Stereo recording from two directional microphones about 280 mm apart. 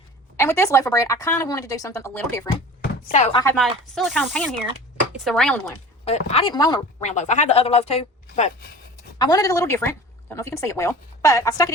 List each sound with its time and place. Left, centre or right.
0.3 s speech: centre
3.1 s speech: left
3.4 s speech: centre
6.1 s speech: left